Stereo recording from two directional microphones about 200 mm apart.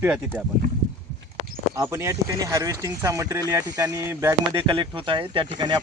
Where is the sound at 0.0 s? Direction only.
10° right (ahead or behind).